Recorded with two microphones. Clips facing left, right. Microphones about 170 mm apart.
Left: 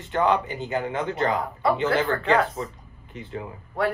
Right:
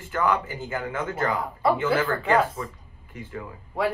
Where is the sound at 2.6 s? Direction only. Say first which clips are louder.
Left 2 dB; 25° left (ahead or behind).